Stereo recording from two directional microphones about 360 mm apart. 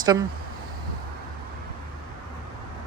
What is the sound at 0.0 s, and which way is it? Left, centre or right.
Speech, centre.